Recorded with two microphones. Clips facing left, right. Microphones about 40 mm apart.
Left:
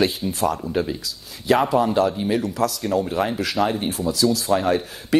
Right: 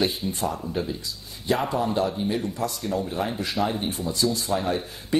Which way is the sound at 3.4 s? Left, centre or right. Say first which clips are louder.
Left 4 dB; left.